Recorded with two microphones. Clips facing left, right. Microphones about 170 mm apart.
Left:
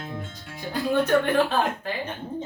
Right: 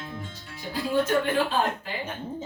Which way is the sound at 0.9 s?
60° left (ahead or behind).